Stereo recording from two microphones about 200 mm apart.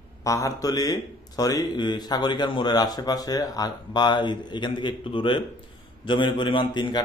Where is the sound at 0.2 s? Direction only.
15° left (ahead or behind).